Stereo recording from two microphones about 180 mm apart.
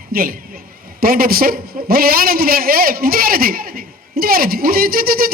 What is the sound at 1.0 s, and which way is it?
A man's voice, 55° right (ahead or behind).